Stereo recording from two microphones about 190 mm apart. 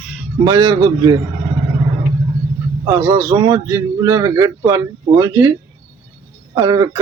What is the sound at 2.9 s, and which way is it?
A man's voice, 15° right (ahead or behind).